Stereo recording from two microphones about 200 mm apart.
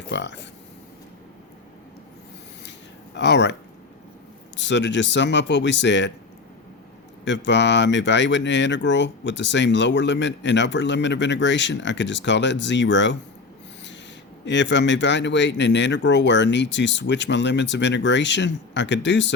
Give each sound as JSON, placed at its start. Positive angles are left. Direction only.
{"t": 0.1, "sound": "speech", "side_deg": 60}
{"t": 3.2, "sound": "speech", "side_deg": 60}
{"t": 4.5, "sound": "speech", "side_deg": 60}
{"t": 7.3, "sound": "speech", "side_deg": 60}
{"t": 14.4, "sound": "speech", "side_deg": 65}